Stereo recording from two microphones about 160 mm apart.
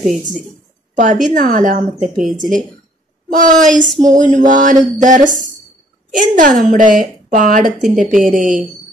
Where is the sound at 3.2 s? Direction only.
55° right (ahead or behind).